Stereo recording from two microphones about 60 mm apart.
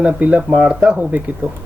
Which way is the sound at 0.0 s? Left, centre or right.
Centre.